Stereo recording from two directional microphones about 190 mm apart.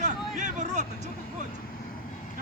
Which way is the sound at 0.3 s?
40° right (ahead or behind).